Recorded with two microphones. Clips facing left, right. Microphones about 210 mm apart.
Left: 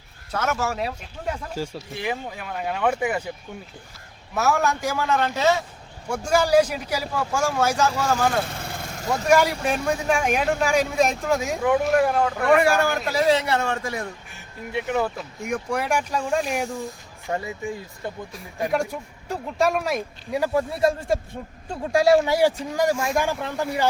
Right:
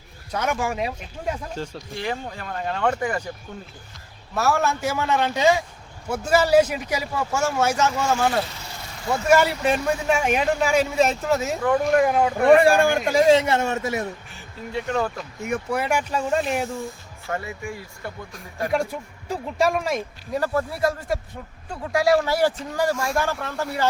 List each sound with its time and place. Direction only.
0.3 s a man's voice: 10° right (ahead or behind)
1.5 s speech: 5° left (ahead or behind)
4.4 s a man's voice: centre (ahead or behind)
7.7 s speech: 10° left (ahead or behind)
7.9 s a man's voice: 10° right (ahead or behind)
8.4 s vehicle: 55° left (ahead or behind)
9.0 s speech: 5° right (ahead or behind)
12.4 s a man's voice: 30° right (ahead or behind)
14.7 s speech: 15° left (ahead or behind); by 16.8 s centre (ahead or behind)
17.2 s speech: 15° left (ahead or behind)
18.7 s speech: centre (ahead or behind); by 23.9 s 15° left (ahead or behind)